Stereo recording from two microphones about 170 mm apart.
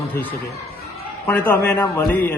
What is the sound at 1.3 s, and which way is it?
A man's voice, 10° left (ahead or behind).